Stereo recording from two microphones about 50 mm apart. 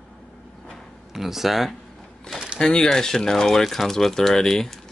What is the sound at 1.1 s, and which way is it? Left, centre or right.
Speech, centre.